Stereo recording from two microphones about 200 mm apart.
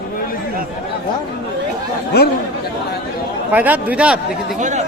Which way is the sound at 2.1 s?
50° left (ahead or behind).